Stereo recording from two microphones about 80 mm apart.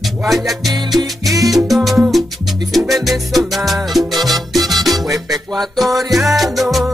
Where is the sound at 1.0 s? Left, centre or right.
Right.